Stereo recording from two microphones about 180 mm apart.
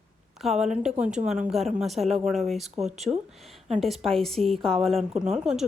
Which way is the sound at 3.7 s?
Centre (ahead or behind).